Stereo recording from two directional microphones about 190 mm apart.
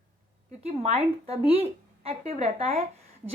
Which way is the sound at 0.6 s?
35° right (ahead or behind).